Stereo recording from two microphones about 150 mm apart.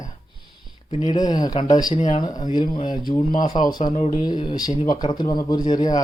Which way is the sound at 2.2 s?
30° left (ahead or behind).